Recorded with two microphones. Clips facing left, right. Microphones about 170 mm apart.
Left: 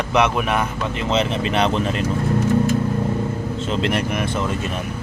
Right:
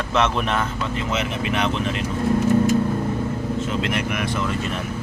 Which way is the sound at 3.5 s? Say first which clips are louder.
Left 5 dB; 30° left (ahead or behind).